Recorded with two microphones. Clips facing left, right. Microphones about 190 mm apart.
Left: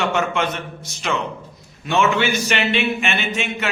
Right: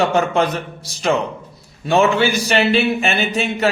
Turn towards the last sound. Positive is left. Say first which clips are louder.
# right 4 dB
turn(degrees=-35)  # may be behind; listen again after turning